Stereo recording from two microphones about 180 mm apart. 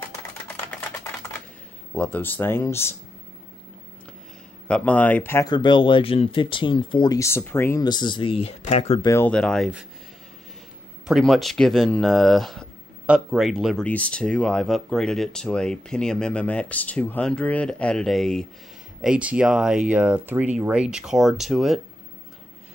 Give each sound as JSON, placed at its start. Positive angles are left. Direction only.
{"t": 0.7, "sound": "a sound", "side_deg": 15}
{"t": 2.0, "sound": "speech", "side_deg": 10}
{"t": 4.6, "sound": "speech", "side_deg": 5}
{"t": 9.0, "sound": "speech", "side_deg": 15}
{"t": 9.3, "sound": "speech", "side_deg": 5}
{"t": 11.1, "sound": "speech", "side_deg": 0}